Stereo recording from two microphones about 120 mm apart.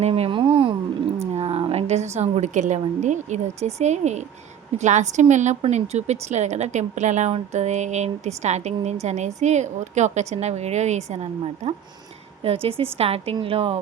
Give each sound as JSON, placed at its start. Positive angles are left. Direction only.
{"t": 0.0, "sound": "a sound", "side_deg": -55}
{"t": 1.3, "sound": "a woman's voice", "side_deg": -60}
{"t": 4.8, "sound": "a woman's voice", "side_deg": -85}
{"t": 5.7, "sound": "a woman's voice", "side_deg": -70}
{"t": 12.6, "sound": "a woman's voice", "side_deg": -55}